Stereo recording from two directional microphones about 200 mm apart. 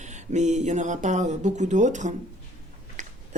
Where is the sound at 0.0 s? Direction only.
35° right (ahead or behind).